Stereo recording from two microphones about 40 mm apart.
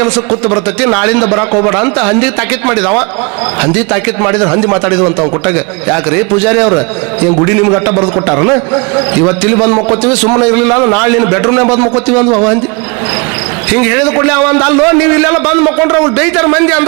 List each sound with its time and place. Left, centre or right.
0.0 s a man's voice: centre
0.9 s a man's voice: centre
1.4 s a man's voice: centre
5.5 s a man's voice: centre
7.9 s a man's voice: centre
13.7 s a man's voice: centre